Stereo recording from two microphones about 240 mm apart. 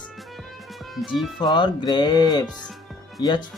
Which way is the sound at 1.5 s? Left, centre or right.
Centre.